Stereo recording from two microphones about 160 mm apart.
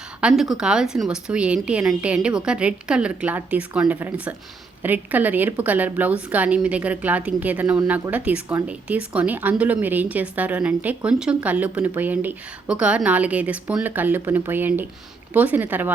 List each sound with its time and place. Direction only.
0.2 s speech: 5° right (ahead or behind)